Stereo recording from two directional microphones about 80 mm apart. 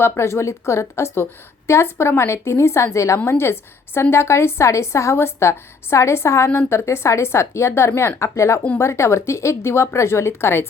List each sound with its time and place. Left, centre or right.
0.0 s a woman's voice: left